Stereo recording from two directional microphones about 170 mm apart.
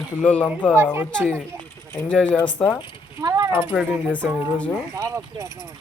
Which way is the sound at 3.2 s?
20° right (ahead or behind).